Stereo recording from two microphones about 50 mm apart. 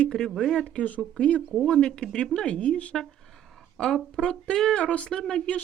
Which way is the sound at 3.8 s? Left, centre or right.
Centre.